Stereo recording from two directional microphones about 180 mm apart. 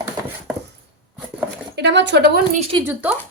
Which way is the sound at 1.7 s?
75° right (ahead or behind).